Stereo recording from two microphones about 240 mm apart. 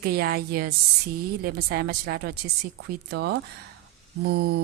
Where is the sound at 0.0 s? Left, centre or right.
Right.